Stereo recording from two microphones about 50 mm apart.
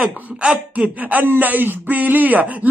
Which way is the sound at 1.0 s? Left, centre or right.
Right.